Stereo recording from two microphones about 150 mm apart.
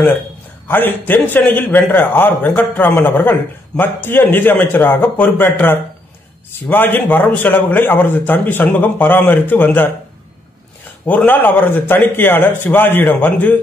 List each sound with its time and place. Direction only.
0.7 s a man's voice: 15° left (ahead or behind)
11.1 s a man's voice: 10° left (ahead or behind)